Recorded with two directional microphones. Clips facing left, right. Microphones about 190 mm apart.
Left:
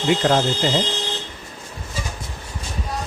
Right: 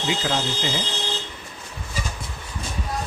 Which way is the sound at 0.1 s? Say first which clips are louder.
Left 8 dB; 50° left (ahead or behind).